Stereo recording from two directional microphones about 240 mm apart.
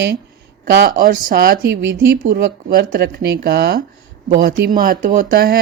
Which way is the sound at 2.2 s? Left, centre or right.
Right.